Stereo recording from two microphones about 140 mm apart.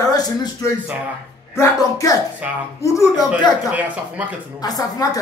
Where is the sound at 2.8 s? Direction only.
20° left (ahead or behind).